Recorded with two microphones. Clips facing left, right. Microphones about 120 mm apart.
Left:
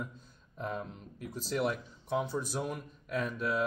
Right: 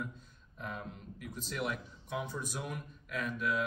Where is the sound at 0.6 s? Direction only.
35° left (ahead or behind).